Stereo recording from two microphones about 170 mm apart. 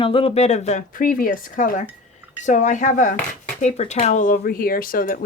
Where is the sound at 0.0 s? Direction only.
35° left (ahead or behind).